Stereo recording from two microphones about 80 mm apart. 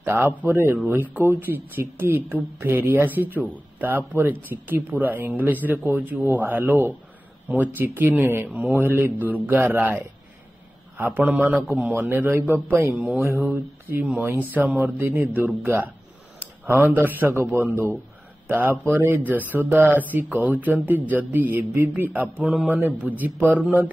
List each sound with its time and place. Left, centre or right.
0.0 s speech: right
8.5 s speech: centre
8.7 s speech: right